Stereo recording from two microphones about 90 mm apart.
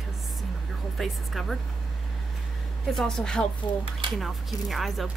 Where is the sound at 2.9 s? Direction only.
5° left (ahead or behind).